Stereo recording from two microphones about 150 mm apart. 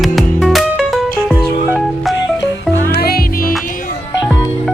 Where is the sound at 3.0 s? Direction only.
85° left.